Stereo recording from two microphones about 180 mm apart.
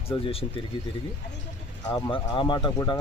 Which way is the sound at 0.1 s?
30° left (ahead or behind).